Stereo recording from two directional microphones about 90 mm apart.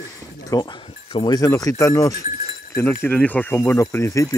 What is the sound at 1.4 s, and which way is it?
Speech, 40° left (ahead or behind).